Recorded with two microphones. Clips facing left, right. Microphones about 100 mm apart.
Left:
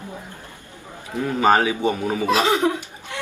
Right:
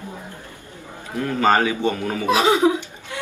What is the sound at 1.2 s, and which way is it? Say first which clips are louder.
Speech: even; 15° left (ahead or behind).